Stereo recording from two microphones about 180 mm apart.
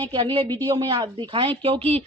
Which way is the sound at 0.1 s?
25° right (ahead or behind).